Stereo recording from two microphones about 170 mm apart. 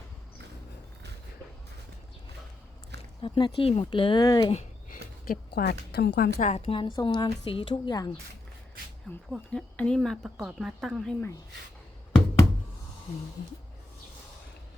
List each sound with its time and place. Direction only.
3.2 s a woman's voice: 30° left (ahead or behind)
5.3 s a woman's voice: 65° left (ahead or behind)
6.4 s a woman's voice: 35° left (ahead or behind)
9.3 s speech: 5° left (ahead or behind)